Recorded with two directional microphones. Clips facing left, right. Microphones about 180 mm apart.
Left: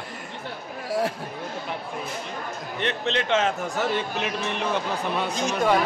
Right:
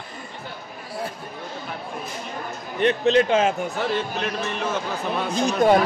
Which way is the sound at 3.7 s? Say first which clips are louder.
Right 1 dB; 15° left (ahead or behind).